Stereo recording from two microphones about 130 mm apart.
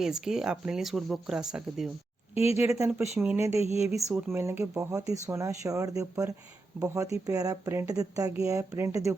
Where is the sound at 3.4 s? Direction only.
20° right (ahead or behind).